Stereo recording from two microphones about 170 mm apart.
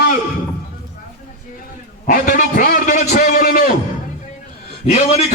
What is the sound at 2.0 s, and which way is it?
A man's voice, 55° left (ahead or behind).